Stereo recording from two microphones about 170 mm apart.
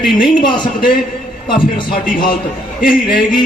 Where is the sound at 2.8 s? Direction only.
55° left (ahead or behind).